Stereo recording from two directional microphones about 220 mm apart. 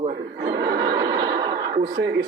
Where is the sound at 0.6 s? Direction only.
20° right (ahead or behind).